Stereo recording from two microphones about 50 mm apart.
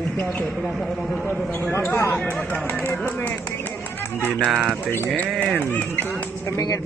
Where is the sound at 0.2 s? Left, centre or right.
Left.